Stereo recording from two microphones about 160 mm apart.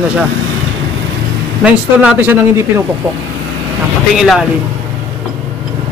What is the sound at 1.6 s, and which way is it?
Speech, 10° right (ahead or behind).